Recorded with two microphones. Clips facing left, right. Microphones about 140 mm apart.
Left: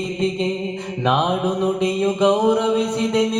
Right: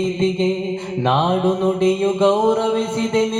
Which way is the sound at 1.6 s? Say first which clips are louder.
Right 3 dB; centre (ahead or behind).